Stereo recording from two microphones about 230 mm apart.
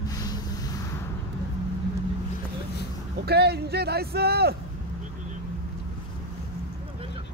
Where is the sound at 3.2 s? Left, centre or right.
Right.